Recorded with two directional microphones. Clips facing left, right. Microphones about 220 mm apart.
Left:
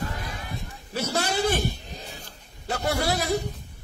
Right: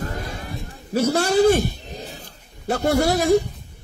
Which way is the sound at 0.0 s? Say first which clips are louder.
Right 4 dB; 45° right (ahead or behind).